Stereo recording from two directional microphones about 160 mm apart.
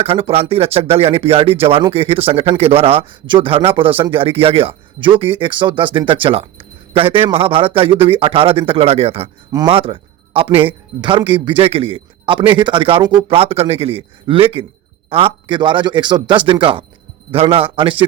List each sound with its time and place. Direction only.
0.0 s speech: 35° right (ahead or behind)